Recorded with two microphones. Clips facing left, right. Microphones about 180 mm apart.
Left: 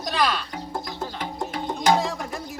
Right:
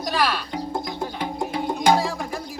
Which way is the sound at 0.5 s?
15° right (ahead or behind).